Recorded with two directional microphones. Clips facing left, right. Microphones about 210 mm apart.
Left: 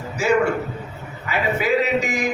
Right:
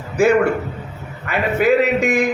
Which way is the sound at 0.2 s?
55° right (ahead or behind).